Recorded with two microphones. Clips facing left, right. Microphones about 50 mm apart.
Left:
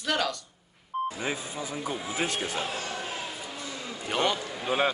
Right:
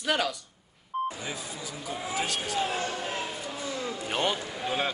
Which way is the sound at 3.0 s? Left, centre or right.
Right.